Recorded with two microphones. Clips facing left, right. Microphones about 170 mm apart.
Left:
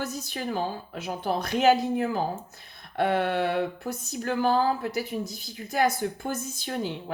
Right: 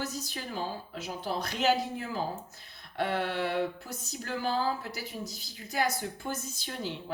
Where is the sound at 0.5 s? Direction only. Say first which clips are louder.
Left 4 dB; 55° left (ahead or behind).